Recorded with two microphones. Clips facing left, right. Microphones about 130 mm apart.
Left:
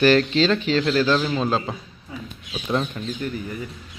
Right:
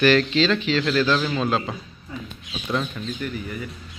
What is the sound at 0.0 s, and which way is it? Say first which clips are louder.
Speech: left 1 dB; 40° left (ahead or behind).